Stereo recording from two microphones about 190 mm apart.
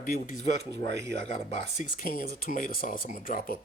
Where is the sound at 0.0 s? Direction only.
45° left (ahead or behind).